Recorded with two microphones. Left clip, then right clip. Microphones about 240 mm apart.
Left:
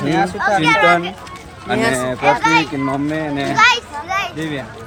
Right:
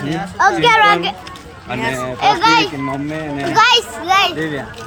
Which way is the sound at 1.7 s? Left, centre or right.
Centre.